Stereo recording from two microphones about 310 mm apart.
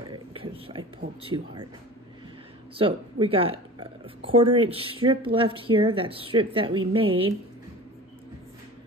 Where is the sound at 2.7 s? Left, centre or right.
Centre.